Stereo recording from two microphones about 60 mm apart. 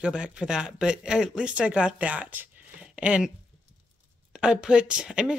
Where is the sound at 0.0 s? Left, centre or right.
Centre.